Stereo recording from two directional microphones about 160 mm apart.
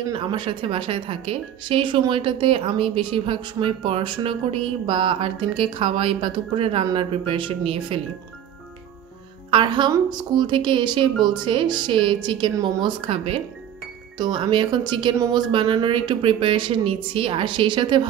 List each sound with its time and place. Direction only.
0.0 s speech: 30° right (ahead or behind)
9.5 s a woman's voice: 30° right (ahead or behind)